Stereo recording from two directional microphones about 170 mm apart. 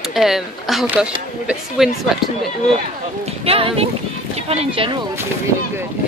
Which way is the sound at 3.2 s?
35° right (ahead or behind).